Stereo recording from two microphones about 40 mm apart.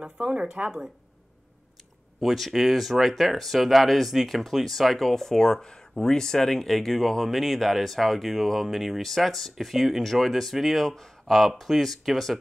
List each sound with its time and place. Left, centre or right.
0.0 s speech: right
2.1 s speech: centre
9.0 s speech: centre